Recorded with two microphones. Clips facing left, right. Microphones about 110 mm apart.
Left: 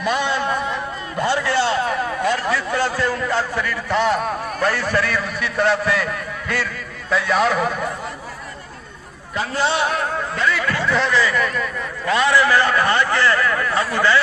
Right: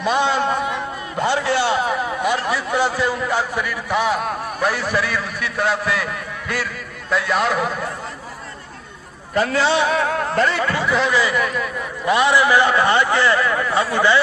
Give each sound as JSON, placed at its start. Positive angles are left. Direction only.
{"t": 0.0, "sound": "a man's voice", "side_deg": -20}
{"t": 9.3, "sound": "a man's voice", "side_deg": -60}
{"t": 10.0, "sound": "music", "side_deg": -90}
{"t": 10.5, "sound": "speech", "side_deg": -30}
{"t": 10.9, "sound": "a man's voice", "side_deg": -5}